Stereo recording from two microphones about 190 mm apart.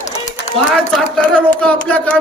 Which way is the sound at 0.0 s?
40° left (ahead or behind).